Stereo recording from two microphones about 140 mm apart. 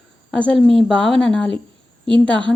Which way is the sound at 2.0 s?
35° right (ahead or behind).